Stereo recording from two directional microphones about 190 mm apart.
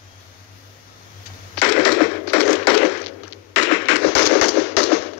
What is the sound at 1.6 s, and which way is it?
Tap, 65° left (ahead or behind).